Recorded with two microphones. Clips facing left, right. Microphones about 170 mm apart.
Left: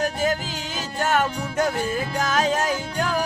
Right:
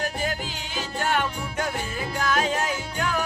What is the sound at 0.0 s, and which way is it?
Music, 45° left (ahead or behind).